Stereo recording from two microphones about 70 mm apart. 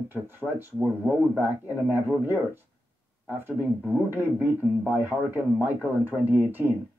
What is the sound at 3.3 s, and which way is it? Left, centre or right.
Speech, right.